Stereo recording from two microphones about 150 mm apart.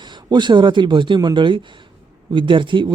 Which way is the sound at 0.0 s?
30° right (ahead or behind).